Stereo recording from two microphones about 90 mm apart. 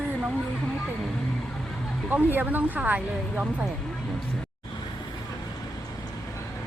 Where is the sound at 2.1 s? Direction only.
15° right (ahead or behind).